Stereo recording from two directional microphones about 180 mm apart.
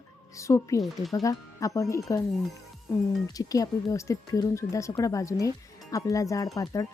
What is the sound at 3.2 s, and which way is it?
Speech, 20° left (ahead or behind).